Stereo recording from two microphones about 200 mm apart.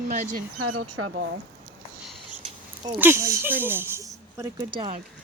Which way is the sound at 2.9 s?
10° right (ahead or behind).